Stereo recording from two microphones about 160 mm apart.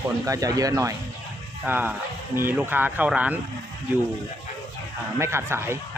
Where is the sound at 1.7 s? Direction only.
10° right (ahead or behind).